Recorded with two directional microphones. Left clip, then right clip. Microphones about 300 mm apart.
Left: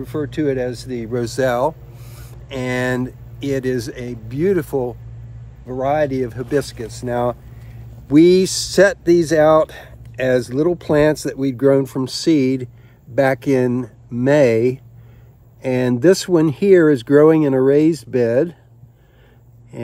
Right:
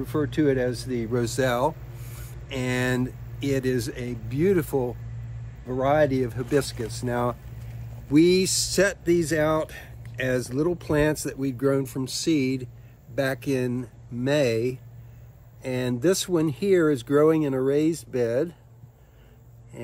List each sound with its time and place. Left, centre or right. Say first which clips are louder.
0.0 s speech: left 3 dB; centre; by 18.6 s left